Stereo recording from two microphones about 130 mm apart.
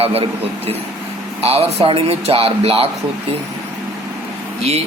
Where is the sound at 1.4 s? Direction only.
50° right (ahead or behind).